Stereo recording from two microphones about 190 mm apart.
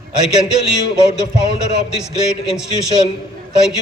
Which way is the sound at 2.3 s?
5° right (ahead or behind).